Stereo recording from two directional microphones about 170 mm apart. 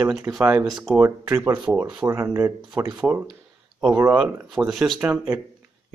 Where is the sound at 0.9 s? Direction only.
15° right (ahead or behind).